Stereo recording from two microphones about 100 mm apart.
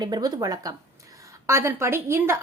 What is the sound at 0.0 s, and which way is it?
A woman's voice, 40° right (ahead or behind).